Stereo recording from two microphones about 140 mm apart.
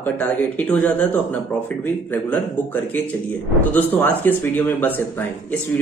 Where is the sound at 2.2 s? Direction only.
10° left (ahead or behind).